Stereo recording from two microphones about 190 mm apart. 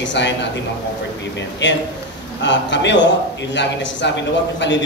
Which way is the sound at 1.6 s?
70° left (ahead or behind).